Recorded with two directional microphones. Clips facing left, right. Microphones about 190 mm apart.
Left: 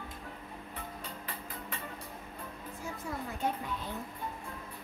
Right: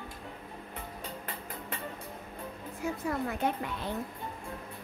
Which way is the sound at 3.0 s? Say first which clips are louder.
Right 4 dB; 70° right (ahead or behind).